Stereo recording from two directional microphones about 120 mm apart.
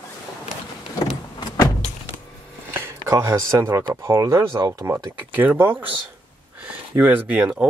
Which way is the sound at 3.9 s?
25° right (ahead or behind).